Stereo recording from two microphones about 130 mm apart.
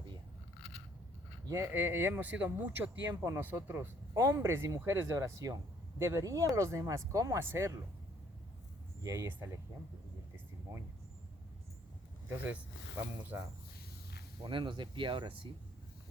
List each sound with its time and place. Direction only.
1.5 s speech: 20° right (ahead or behind)
9.0 s speech: 20° right (ahead or behind)
10.3 s a sound: 20° right (ahead or behind)
14.4 s speech: 40° right (ahead or behind)